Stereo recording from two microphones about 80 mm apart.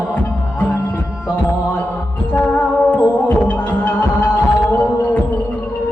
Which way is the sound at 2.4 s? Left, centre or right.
Centre.